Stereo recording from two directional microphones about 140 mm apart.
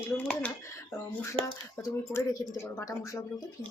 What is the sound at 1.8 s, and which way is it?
Speech, 25° left (ahead or behind).